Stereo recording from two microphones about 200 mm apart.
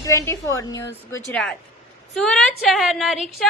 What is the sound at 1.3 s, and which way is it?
A woman's voice, 5° left (ahead or behind).